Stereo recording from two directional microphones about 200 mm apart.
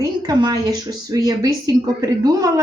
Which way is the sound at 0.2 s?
20° right (ahead or behind).